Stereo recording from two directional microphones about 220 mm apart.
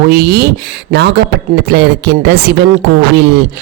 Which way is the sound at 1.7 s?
50° right (ahead or behind).